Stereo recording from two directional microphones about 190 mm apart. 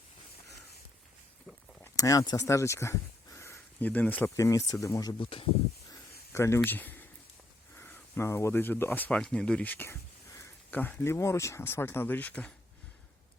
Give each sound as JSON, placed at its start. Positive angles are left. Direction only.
{"t": 1.8, "sound": "speech", "side_deg": 20}
{"t": 5.9, "sound": "a sound", "side_deg": 15}
{"t": 7.8, "sound": "speech", "side_deg": 10}